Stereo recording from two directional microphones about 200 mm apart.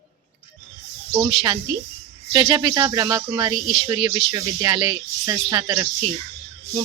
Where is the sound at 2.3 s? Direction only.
20° right (ahead or behind).